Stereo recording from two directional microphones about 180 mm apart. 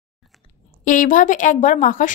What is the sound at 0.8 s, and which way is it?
A woman's voice, 45° left (ahead or behind).